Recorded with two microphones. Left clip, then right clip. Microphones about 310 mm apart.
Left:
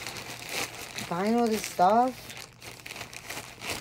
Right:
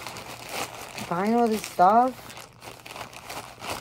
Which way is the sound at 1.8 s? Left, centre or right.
Right.